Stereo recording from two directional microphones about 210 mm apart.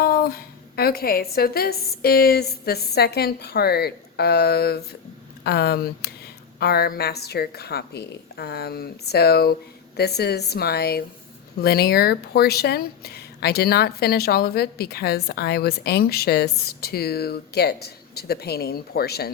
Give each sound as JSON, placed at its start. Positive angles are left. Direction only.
{"t": 0.0, "sound": "speech", "side_deg": 45}